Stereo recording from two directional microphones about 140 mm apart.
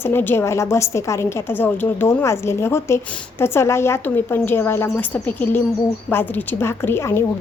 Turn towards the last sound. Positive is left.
turn(degrees=15)  # may be behind; listen again after turning